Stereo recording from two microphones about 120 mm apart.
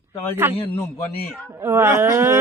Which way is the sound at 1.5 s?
20° right (ahead or behind).